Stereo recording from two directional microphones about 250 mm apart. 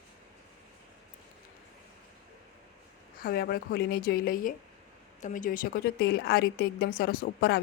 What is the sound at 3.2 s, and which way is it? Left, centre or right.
Speech, left.